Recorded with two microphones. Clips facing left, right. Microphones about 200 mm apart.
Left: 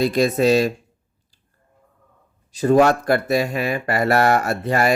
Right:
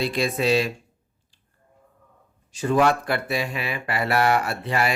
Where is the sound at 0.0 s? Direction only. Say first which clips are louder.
Left 6 dB; 45° left (ahead or behind).